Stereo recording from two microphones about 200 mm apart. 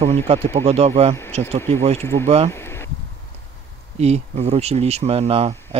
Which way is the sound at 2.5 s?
10° left (ahead or behind).